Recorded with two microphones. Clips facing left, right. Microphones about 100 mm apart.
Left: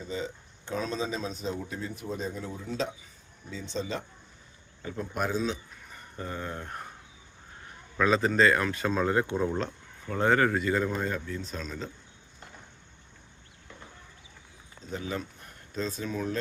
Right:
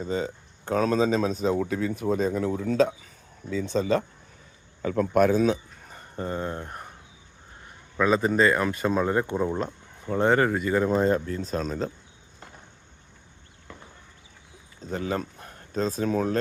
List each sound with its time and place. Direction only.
0.0 s speech: 50° right (ahead or behind); by 1.3 s 75° right (ahead or behind)
1.3 s speech: 45° right (ahead or behind)
1.5 s speech: 85° right; by 4.0 s 55° right (ahead or behind)
4.8 s speech: 90° right; by 6.7 s 25° right (ahead or behind)
6.7 s a sound: 5° right (ahead or behind)
7.9 s speech: 10° right (ahead or behind)
10.9 s speech: 35° right (ahead or behind)
14.8 s speech: 45° right (ahead or behind)